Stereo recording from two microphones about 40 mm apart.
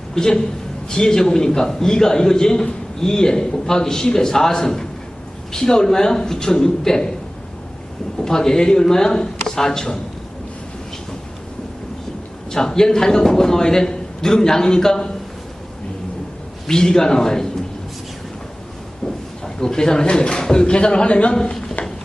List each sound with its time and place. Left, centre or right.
0.1 s a man's voice: centre
8.2 s a man's voice: centre
12.5 s a man's voice: centre
16.6 s a man's voice: centre
19.5 s a man's voice: centre